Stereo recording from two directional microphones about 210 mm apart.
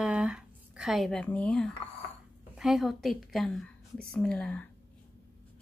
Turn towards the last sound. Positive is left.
turn(degrees=5)  # may be behind; listen again after turning